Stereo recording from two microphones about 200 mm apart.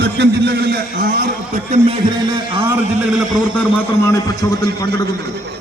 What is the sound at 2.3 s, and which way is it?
Speech, 25° right (ahead or behind).